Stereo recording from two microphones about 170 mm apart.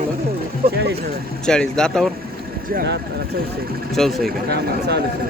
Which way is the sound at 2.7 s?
75° right (ahead or behind).